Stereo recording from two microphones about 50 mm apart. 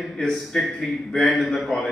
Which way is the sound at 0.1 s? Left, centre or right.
Centre.